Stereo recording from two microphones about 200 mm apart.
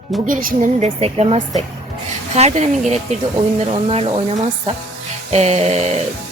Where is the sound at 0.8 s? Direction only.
30° right (ahead or behind).